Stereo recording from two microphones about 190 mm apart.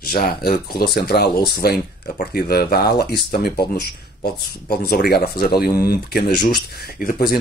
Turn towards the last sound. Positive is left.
turn(degrees=50)  # may be behind; listen again after turning